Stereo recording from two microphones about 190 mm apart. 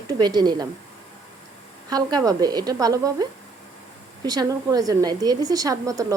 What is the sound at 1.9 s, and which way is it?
A woman's voice, 20° right (ahead or behind).